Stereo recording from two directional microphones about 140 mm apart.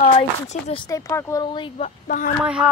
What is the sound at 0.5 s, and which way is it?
Speech, 55° left (ahead or behind).